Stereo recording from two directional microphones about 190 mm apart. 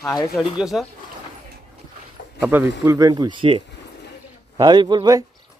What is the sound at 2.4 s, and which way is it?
A man's voice, 10° right (ahead or behind).